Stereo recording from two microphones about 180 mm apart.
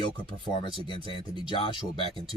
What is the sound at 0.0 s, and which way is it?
Speech, 25° left (ahead or behind).